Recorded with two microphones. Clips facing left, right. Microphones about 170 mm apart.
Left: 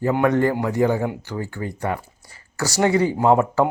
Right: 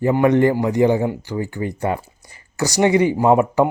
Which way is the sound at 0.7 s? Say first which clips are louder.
Right 4 dB; 15° right (ahead or behind).